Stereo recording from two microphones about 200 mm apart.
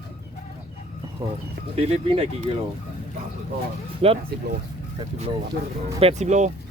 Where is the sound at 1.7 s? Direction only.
30° right (ahead or behind).